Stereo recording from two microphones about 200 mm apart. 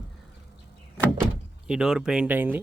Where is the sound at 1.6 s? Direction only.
5° right (ahead or behind).